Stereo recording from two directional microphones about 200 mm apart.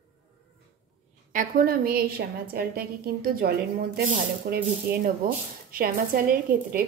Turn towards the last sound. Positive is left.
turn(degrees=-45)  # may be behind; listen again after turning